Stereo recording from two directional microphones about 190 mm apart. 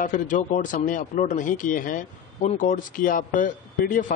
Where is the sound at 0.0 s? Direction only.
40° left (ahead or behind).